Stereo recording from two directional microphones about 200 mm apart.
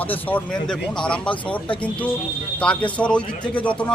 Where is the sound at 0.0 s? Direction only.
10° left (ahead or behind).